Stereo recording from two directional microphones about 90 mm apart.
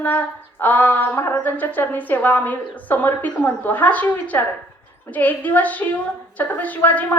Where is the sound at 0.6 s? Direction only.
20° left (ahead or behind).